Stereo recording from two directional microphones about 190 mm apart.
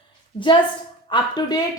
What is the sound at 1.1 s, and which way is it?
Speech, 20° left (ahead or behind).